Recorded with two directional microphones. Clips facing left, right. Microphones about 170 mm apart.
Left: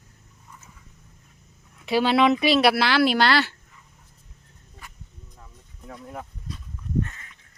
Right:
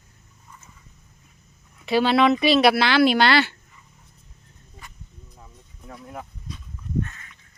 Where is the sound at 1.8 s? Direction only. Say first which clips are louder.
Right 1 dB; 10° left (ahead or behind).